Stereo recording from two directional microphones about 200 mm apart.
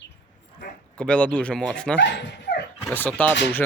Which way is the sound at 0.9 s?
5° left (ahead or behind).